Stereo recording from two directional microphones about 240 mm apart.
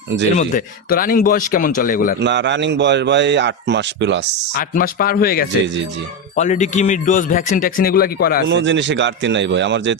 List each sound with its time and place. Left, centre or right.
0.3 s a man's voice: left
2.1 s a man's voice: right
4.5 s a man's voice: left
8.4 s a man's voice: right